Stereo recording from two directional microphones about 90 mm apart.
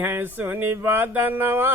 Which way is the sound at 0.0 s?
25° right (ahead or behind).